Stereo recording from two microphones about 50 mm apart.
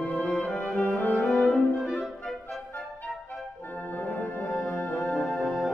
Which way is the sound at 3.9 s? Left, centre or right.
Left.